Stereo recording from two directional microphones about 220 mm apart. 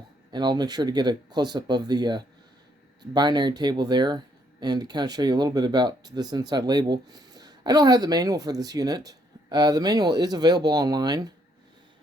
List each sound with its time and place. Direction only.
0.3 s speech: 20° right (ahead or behind)